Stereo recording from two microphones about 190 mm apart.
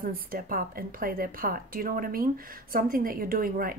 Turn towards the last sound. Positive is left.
turn(degrees=-50)  # may be behind; listen again after turning